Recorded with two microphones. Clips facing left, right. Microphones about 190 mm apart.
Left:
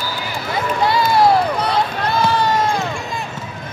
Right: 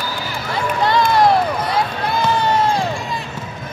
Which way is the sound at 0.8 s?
10° left (ahead or behind).